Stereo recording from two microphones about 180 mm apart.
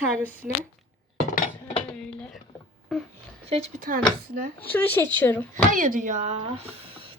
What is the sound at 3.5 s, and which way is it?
Speech, 40° right (ahead or behind).